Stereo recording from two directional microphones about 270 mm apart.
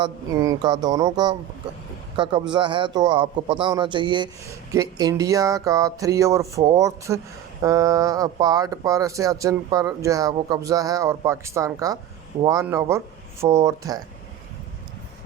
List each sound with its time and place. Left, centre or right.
0.0 s speech: centre